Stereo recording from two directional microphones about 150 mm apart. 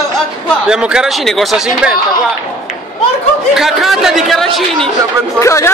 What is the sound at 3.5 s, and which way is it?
Speech, centre (ahead or behind).